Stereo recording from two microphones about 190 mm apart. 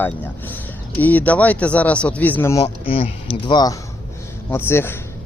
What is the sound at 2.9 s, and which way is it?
Speech, 30° left (ahead or behind).